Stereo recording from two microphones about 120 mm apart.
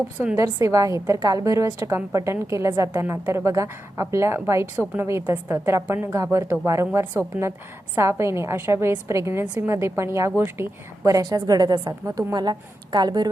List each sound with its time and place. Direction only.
0.3 s a woman's voice: 25° right (ahead or behind)